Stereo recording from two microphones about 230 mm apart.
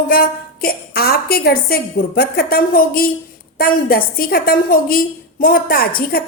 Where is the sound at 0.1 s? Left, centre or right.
Left.